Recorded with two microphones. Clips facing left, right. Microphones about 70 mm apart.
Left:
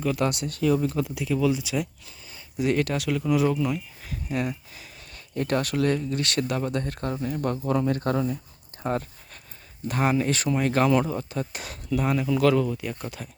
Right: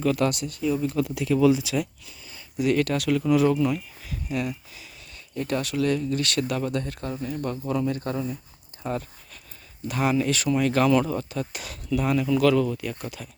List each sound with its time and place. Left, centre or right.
0.0 s speech: centre
0.4 s speech: left
1.0 s speech: centre
2.0 s speech: left; by 3.8 s centre
4.0 s speech: left
5.1 s speech: left
5.9 s speech: left
6.8 s speech: left
8.8 s a sound: left
9.9 s speech: left